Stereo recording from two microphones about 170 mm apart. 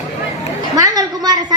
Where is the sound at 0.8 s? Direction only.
20° right (ahead or behind).